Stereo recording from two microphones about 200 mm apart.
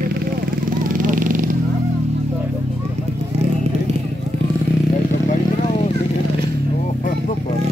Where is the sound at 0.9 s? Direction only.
40° right (ahead or behind).